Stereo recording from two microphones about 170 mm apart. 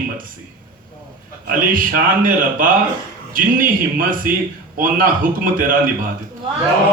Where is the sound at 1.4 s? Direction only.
55° right (ahead or behind).